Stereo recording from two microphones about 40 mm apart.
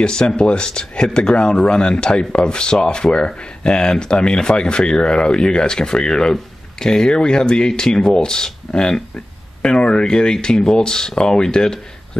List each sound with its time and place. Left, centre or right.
0.0 s speech: centre